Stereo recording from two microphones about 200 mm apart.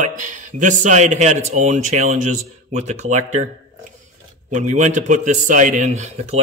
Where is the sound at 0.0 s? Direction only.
40° right (ahead or behind).